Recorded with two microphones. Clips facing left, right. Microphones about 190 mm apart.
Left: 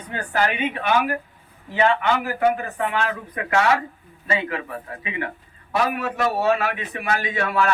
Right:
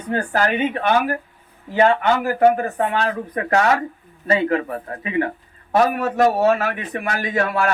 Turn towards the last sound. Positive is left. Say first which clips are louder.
# right 2 dB
turn(degrees=-40)  # may be behind; listen again after turning